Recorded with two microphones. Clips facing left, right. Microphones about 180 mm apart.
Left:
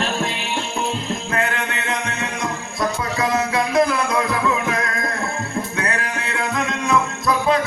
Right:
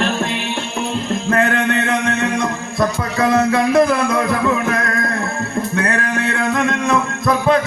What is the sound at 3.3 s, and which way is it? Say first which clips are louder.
Music: right 5 dB; 50° right (ahead or behind).